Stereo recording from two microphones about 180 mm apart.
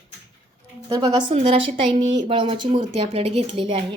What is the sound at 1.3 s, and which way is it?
A woman's voice, 35° right (ahead or behind).